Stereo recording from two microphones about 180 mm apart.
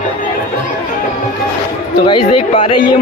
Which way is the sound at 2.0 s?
25° left (ahead or behind).